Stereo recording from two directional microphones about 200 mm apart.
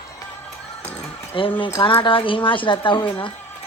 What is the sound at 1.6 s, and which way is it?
A woman's voice, 25° left (ahead or behind).